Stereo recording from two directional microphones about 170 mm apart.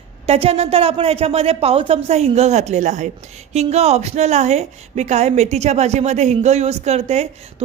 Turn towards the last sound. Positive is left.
turn(degrees=-40)  # may be behind; listen again after turning